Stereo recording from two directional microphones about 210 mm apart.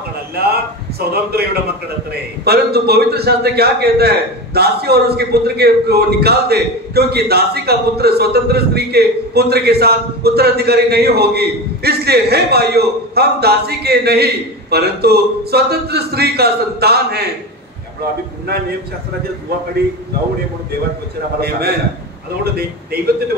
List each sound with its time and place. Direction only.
1.1 s a man's voice: 50° right (ahead or behind)
21.4 s a man's voice: 50° right (ahead or behind)